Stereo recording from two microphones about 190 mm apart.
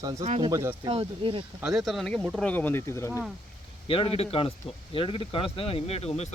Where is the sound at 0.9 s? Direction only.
30° right (ahead or behind).